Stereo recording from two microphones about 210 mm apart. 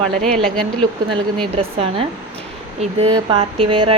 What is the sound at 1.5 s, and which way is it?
Speech, 30° right (ahead or behind).